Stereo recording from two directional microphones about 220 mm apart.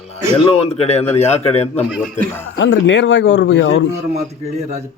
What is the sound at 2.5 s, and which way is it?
Speech, 55° left (ahead or behind).